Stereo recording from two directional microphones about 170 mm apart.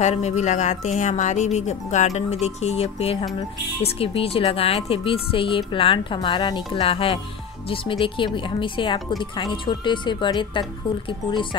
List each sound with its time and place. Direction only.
0.0 s speech: 40° left (ahead or behind)